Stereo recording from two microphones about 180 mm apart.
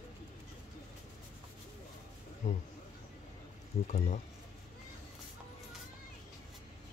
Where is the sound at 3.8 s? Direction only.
40° left (ahead or behind).